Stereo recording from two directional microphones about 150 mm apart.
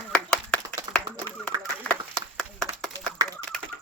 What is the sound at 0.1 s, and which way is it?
Clapping, 5° left (ahead or behind).